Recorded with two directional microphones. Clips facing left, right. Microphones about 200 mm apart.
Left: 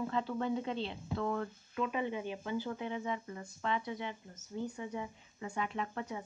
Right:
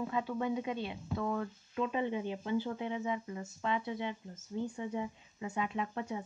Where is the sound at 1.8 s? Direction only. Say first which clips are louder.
Right 2 dB; 25° right (ahead or behind).